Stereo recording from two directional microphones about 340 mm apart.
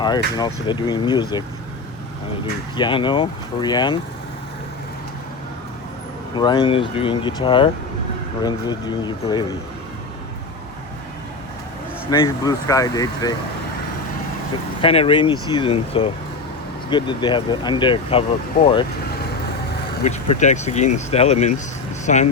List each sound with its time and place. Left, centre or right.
0.3 s speech: centre
2.7 s speech: centre
6.3 s speech: centre
12.1 s speech: centre
14.8 s speech: centre
20.1 s speech: centre